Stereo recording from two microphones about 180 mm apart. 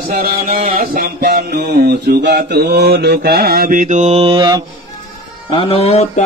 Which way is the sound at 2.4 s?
65° right (ahead or behind).